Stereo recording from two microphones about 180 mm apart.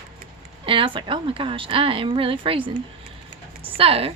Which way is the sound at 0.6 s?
30° right (ahead or behind).